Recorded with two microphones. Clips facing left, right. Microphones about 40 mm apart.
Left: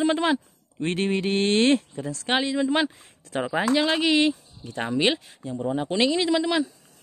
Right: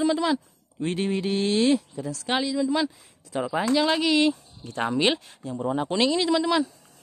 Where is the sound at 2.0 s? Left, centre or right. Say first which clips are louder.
Left 2 dB; left.